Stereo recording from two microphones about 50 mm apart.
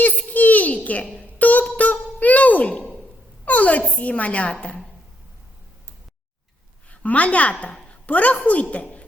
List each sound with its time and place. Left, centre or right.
0.0 s a sound: left
3.4 s a woman's voice: left
7.0 s a woman's voice: left